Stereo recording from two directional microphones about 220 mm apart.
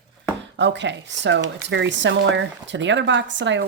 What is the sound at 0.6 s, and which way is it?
Speech, 55° right (ahead or behind).